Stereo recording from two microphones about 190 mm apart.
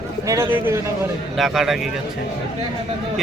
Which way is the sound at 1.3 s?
Centre (ahead or behind).